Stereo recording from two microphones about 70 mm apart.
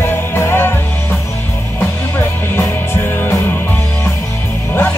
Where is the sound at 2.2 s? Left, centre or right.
Left.